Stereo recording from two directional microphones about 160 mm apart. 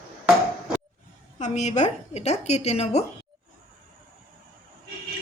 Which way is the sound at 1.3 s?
45° left (ahead or behind).